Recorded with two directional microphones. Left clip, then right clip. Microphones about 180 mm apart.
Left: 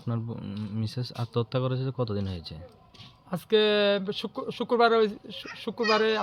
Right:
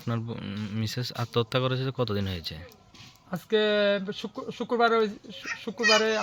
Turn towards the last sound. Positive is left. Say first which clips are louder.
# right 2 dB
turn(degrees=25)  # may be behind; listen again after turning